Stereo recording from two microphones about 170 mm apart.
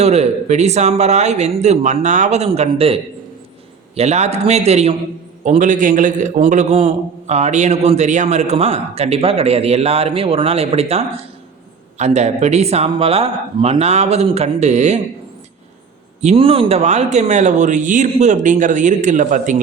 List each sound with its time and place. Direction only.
0.0 s a man's voice: 40° right (ahead or behind)
16.2 s speech: 35° right (ahead or behind)